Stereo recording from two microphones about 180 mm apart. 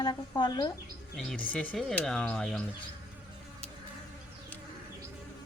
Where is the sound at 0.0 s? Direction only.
25° left (ahead or behind).